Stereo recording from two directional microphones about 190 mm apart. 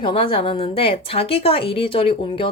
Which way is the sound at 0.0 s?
30° left (ahead or behind).